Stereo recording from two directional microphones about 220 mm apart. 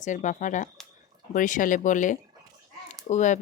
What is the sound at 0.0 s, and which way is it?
Speech, 35° left (ahead or behind).